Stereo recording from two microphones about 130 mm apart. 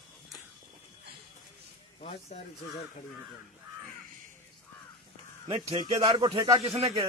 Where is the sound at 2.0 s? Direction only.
60° left (ahead or behind).